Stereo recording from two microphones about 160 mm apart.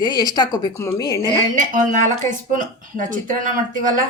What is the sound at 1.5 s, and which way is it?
Speech, 55° right (ahead or behind).